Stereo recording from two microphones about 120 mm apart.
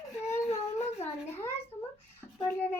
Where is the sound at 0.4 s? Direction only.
60° left (ahead or behind).